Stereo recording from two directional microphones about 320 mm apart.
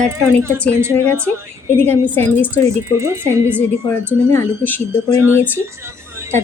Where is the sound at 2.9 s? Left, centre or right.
Centre.